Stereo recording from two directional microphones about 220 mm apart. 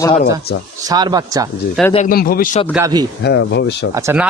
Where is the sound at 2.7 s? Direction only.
15° right (ahead or behind).